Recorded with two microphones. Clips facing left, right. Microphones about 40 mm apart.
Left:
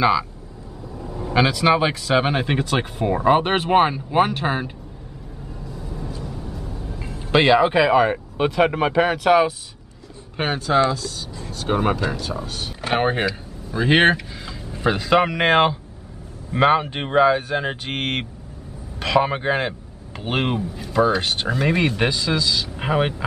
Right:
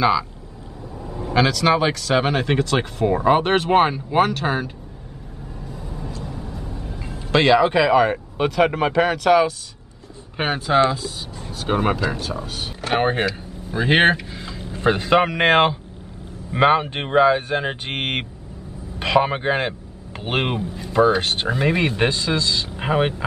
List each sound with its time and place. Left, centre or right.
0.0 s speech: centre
0.9 s vehicle: centre
1.3 s speech: centre
3.1 s speech: centre
3.7 s speech: centre
4.3 s speech: centre
6.6 s train: right
7.3 s speech: centre
10.3 s speech: centre